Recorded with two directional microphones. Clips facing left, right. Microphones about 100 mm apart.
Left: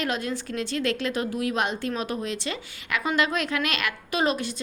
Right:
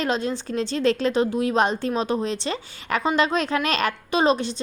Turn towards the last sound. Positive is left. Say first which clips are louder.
# right 5 dB
turn(degrees=-25)  # may be behind; listen again after turning